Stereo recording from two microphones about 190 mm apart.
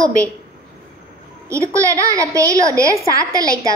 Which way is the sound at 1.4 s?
15° right (ahead or behind).